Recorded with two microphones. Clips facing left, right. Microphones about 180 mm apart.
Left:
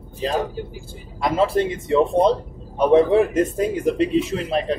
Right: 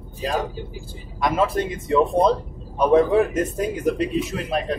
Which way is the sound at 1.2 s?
30° left (ahead or behind).